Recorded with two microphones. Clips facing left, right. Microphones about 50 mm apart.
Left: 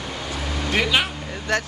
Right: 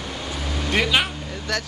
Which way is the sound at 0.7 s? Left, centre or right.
Centre.